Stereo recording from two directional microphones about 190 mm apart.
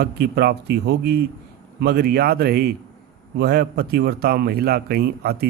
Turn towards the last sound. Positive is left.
turn(degrees=-55)  # may be behind; listen again after turning